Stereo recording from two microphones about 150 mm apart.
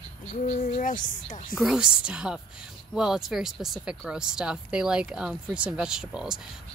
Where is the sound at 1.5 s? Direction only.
Centre (ahead or behind).